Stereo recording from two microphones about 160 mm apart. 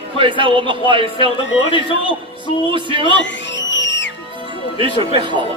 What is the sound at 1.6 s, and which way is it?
Speech, 35° left (ahead or behind).